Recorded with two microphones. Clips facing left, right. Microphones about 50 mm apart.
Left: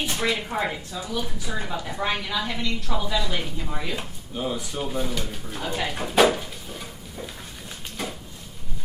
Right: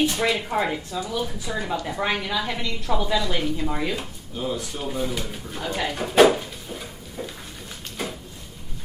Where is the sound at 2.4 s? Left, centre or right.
Centre.